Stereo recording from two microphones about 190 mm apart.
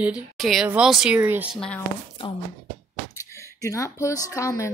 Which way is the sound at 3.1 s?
15° left (ahead or behind).